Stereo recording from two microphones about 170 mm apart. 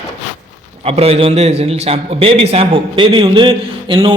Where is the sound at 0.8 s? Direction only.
35° right (ahead or behind).